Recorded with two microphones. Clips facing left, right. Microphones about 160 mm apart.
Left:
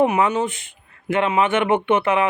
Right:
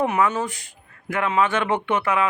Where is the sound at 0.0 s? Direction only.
20° left (ahead or behind).